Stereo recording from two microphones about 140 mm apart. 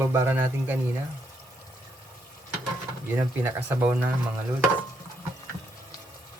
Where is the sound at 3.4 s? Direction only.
15° right (ahead or behind).